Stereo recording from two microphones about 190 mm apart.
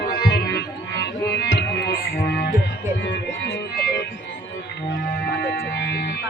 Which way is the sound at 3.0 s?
65° left (ahead or behind).